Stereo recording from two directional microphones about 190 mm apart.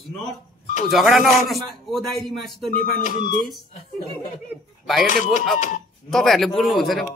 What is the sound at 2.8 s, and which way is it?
Speech, 45° left (ahead or behind).